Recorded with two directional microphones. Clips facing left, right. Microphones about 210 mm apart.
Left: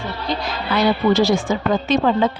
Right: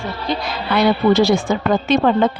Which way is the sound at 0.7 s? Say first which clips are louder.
Right 2 dB; 60° right (ahead or behind).